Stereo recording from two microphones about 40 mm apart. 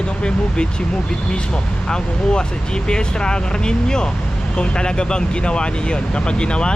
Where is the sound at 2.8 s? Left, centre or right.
Left.